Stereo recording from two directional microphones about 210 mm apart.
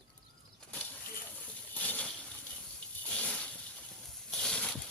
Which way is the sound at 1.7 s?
10° left (ahead or behind).